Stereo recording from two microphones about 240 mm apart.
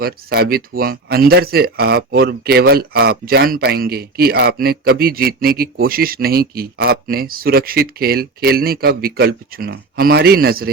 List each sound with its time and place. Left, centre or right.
0.0 s speech: right